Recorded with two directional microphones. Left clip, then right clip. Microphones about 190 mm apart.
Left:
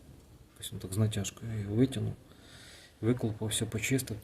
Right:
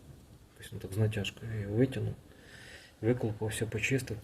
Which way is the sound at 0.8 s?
25° left (ahead or behind).